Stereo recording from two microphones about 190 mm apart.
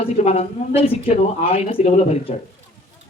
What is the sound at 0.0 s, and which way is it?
Speech, 30° left (ahead or behind).